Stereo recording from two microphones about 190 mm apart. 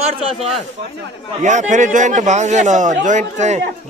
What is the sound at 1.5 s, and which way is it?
A man's voice, 40° right (ahead or behind).